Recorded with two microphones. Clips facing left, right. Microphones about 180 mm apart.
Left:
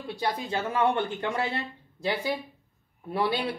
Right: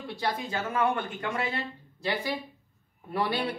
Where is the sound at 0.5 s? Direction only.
30° left (ahead or behind).